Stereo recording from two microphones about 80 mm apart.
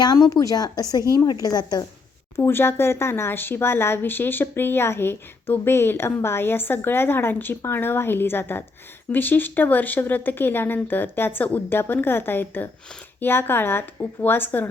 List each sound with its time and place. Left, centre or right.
0.0 s a woman's voice: left
2.3 s speech: left